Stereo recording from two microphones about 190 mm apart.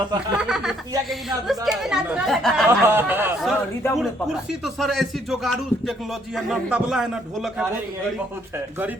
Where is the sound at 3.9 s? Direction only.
Centre (ahead or behind).